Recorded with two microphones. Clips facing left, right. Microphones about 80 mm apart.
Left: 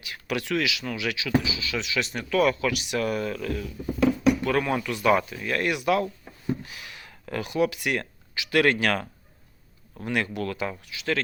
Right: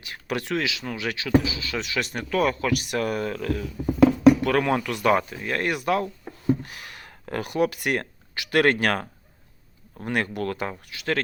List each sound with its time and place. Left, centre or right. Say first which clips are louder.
0.0 s speech: right 1 dB; right
4.4 s speech: right 2 dB; right
5.1 s speech: even; right
6.6 s speech: right 2 dB; right